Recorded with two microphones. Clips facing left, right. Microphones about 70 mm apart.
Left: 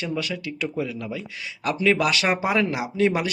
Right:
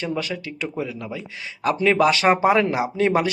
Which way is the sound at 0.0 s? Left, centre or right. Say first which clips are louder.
Right 1 dB; right.